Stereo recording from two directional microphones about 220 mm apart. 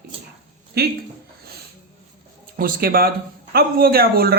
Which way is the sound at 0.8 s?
45° right (ahead or behind).